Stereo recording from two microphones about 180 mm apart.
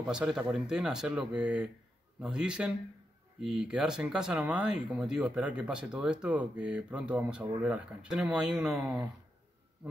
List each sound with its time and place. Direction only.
0.0 s speech: 5° right (ahead or behind)